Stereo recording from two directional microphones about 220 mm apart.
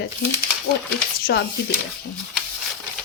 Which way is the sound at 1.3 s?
50° left (ahead or behind).